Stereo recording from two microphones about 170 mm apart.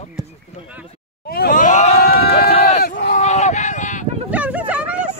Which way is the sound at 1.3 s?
60° left (ahead or behind).